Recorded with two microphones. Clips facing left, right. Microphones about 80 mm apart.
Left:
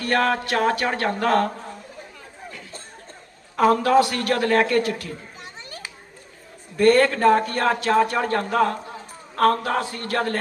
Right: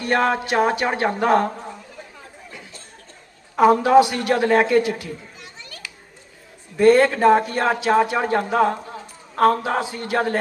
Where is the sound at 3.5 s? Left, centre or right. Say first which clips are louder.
Right 3 dB; centre.